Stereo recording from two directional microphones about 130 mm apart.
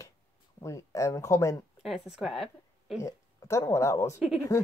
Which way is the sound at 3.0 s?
25° left (ahead or behind).